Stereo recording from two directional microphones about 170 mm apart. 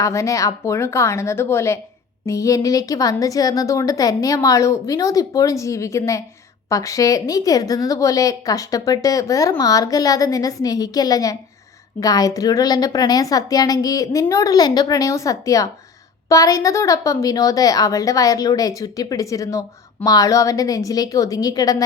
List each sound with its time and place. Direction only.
0.0 s a woman's voice: 20° left (ahead or behind)